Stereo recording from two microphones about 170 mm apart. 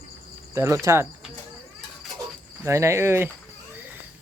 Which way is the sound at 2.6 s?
15° right (ahead or behind).